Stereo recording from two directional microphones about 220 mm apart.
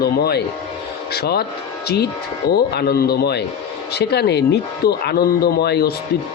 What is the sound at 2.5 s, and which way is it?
Speech, 45° left (ahead or behind).